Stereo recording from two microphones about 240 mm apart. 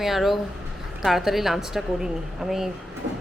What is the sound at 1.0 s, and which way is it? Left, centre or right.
A woman's voice, centre.